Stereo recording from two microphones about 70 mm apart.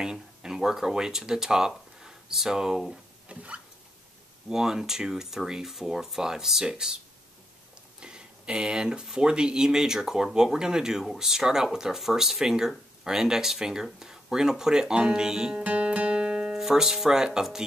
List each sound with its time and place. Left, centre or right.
0.0 s speech: centre
3.3 s rodents: centre
4.5 s speech: centre
8.0 s speech: centre